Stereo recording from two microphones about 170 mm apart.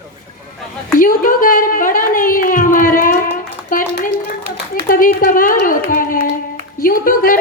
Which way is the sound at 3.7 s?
55° left (ahead or behind).